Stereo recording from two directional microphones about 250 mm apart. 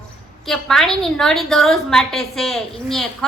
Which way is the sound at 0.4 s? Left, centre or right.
Centre.